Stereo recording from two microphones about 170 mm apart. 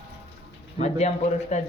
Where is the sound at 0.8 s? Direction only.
40° left (ahead or behind).